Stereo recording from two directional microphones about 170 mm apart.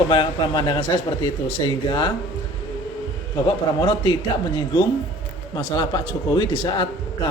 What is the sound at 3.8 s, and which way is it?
A man's voice, 25° left (ahead or behind).